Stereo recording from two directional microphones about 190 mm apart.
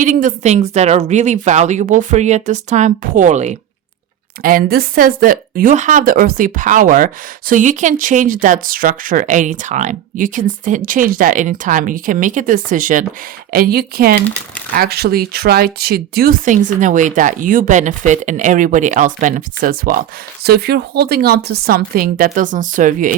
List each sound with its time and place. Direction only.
0.0 s speech: 45° right (ahead or behind)
4.4 s speech: 50° right (ahead or behind)